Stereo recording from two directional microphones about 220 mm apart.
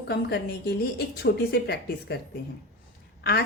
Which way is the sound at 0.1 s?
45° left (ahead or behind).